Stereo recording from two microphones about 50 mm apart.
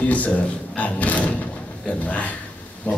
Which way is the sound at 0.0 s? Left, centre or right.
Left.